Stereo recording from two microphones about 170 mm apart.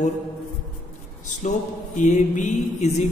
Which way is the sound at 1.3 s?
45° left (ahead or behind).